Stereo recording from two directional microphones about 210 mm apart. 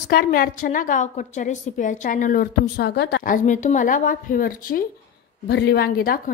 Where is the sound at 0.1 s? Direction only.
45° left (ahead or behind).